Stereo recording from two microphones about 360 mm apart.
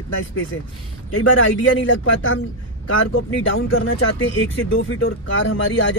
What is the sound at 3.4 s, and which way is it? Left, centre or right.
A man's voice, left.